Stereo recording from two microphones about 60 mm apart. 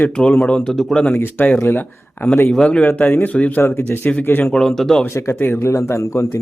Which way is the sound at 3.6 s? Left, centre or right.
Left.